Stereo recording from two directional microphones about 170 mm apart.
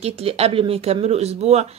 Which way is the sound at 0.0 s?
35° right (ahead or behind).